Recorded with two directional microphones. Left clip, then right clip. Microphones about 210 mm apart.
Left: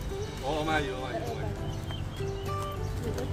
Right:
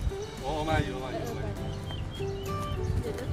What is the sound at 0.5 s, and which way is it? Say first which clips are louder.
Speech: even; 15° left (ahead or behind).